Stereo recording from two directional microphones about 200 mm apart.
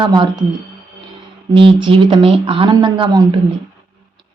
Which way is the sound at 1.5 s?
25° right (ahead or behind).